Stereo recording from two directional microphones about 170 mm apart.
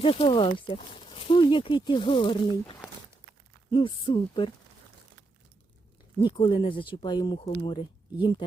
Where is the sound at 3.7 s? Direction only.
30° left (ahead or behind).